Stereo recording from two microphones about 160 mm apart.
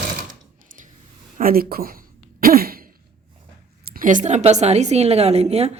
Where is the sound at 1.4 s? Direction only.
65° right (ahead or behind).